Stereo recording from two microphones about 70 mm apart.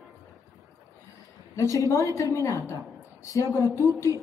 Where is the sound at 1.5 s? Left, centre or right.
Left.